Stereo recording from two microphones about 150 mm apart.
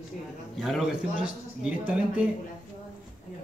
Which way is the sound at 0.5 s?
Centre (ahead or behind).